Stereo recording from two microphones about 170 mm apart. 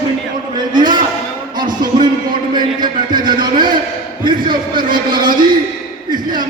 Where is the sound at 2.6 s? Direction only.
25° right (ahead or behind).